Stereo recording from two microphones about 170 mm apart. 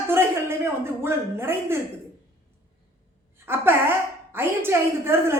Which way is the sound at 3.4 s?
15° right (ahead or behind).